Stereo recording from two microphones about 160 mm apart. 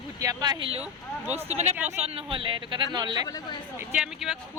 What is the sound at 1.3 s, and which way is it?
A woman's voice, 45° right (ahead or behind).